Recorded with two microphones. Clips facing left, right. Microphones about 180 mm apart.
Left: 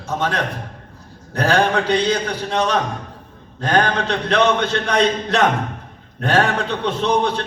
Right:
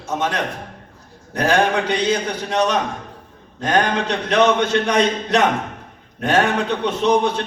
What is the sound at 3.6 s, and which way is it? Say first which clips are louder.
A man's voice: even; 15° right (ahead or behind).